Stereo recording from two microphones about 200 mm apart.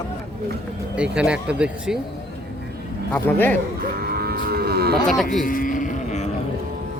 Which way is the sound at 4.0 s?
50° right (ahead or behind).